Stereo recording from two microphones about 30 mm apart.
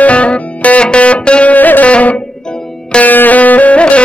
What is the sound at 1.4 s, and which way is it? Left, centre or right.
Music, left.